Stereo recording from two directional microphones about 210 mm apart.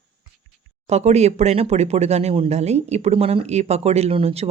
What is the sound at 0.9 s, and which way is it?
Speech, 30° right (ahead or behind).